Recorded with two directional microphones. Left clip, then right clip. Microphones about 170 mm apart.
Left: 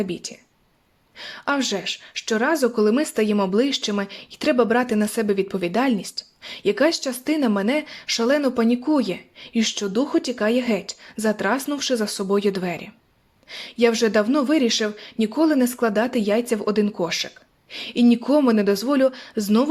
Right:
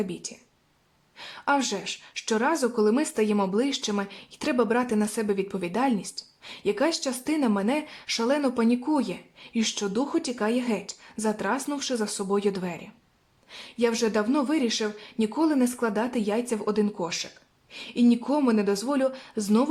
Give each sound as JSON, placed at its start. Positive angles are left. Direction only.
{"t": 0.1, "sound": "a woman's voice", "side_deg": 20}